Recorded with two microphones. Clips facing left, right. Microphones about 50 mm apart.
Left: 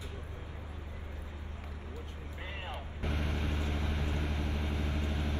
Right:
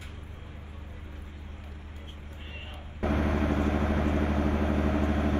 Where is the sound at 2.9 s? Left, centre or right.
Right.